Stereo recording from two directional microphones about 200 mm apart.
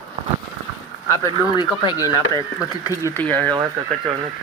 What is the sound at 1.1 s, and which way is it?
Speech, 15° left (ahead or behind).